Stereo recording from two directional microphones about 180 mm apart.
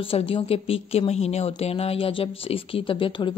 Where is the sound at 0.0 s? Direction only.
30° left (ahead or behind).